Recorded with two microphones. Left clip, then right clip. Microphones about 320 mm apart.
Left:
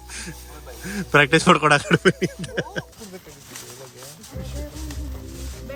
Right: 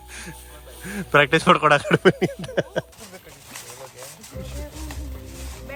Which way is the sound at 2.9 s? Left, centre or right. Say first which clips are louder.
Left 2 dB; centre.